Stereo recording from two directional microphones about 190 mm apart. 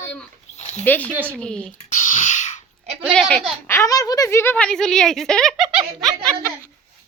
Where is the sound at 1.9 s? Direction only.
40° left (ahead or behind).